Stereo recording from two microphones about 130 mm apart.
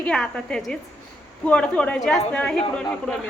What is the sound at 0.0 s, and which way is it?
A woman's voice, 5° left (ahead or behind).